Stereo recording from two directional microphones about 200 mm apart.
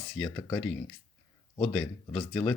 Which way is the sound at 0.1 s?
5° left (ahead or behind).